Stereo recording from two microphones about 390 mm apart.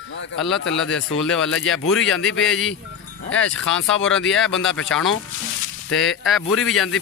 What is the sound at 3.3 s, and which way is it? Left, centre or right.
Speech, left.